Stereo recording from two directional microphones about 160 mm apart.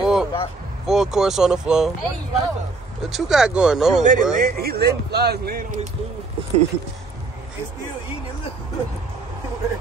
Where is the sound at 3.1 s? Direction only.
Centre (ahead or behind).